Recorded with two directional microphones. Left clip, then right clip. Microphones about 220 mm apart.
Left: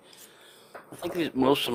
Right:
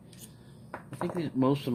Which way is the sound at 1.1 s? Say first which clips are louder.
Left 6 dB; 40° left (ahead or behind).